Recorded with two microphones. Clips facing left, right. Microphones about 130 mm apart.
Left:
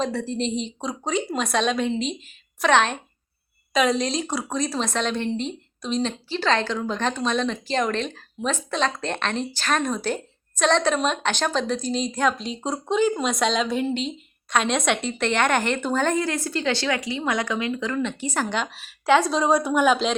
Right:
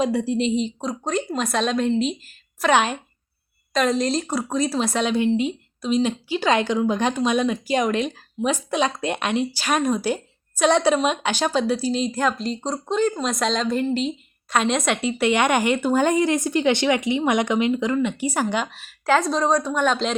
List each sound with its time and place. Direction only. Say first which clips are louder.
0.0 s a woman's voice: right 4 dB; 10° right (ahead or behind); by 20.1 s 5° left (ahead or behind)